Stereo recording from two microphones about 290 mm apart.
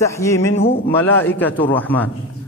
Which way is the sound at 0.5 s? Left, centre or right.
Left.